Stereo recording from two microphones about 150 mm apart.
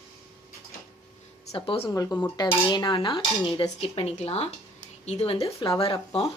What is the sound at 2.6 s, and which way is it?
Speech, 30° left (ahead or behind).